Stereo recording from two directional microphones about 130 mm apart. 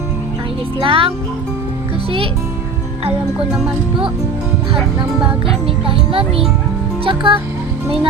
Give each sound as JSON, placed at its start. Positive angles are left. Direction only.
{"t": 0.8, "sound": "speech", "side_deg": -45}
{"t": 5.6, "sound": "speech", "side_deg": -45}